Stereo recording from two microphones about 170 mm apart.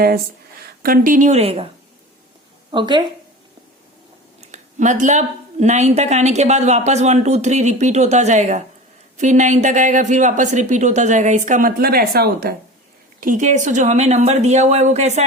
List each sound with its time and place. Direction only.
0.8 s speech: 55° right (ahead or behind); by 1.6 s 35° right (ahead or behind)
2.7 s speech: 25° right (ahead or behind)
4.4 s a woman's voice: 45° right (ahead or behind); by 12.5 s 65° right (ahead or behind)
13.1 s speech: 50° right (ahead or behind)